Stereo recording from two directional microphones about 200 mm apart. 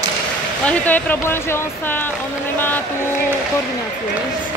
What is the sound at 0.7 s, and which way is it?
Speech, 5° left (ahead or behind).